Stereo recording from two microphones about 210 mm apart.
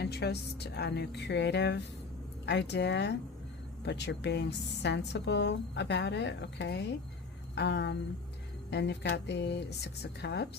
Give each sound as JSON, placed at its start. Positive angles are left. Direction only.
{"t": 0.0, "sound": "a woman's voice", "side_deg": 50}